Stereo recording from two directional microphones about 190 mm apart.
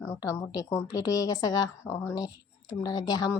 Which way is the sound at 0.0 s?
15° left (ahead or behind).